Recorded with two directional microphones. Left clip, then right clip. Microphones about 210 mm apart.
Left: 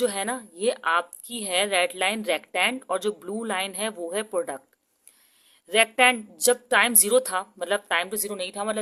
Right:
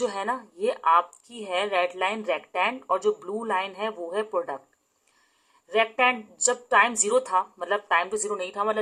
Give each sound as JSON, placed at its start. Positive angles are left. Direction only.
{"t": 0.0, "sound": "a woman's voice", "side_deg": 40}
{"t": 5.7, "sound": "a woman's voice", "side_deg": 45}